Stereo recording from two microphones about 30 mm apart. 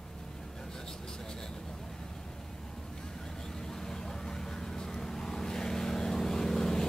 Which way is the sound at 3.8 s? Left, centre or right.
Centre.